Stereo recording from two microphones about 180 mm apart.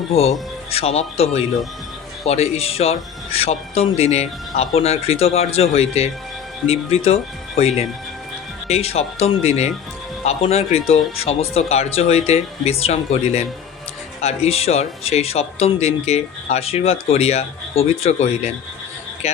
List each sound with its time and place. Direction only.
0.1 s speech: 35° left (ahead or behind)